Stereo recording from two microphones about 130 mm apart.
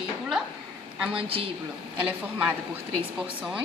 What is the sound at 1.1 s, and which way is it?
Speech, 45° right (ahead or behind).